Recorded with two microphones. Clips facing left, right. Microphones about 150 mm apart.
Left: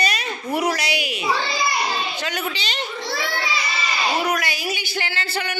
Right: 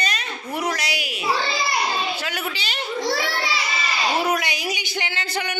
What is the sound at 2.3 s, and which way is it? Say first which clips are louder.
Speech: left 2 dB; 10° right (ahead or behind).